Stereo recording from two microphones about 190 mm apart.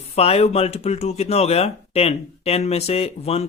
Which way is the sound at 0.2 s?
35° left (ahead or behind).